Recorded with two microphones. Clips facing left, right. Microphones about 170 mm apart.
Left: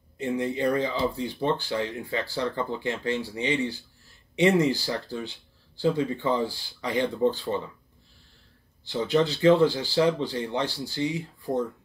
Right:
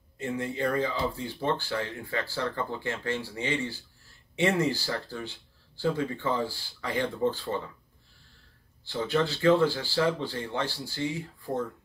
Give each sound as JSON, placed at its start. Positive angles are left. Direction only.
{"t": 0.2, "sound": "speech", "side_deg": 20}
{"t": 8.8, "sound": "speech", "side_deg": 15}